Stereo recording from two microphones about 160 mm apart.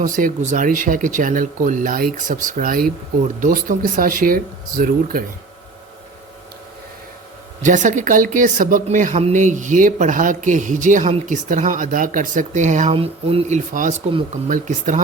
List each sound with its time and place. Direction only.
0.0 s speech: 55° right (ahead or behind)
7.6 s speech: 50° right (ahead or behind)
12.9 s speech: 35° right (ahead or behind)
13.7 s speech: 50° right (ahead or behind)